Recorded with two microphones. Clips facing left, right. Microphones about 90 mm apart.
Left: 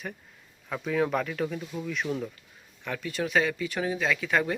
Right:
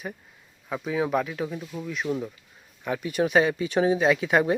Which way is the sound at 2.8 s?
15° right (ahead or behind).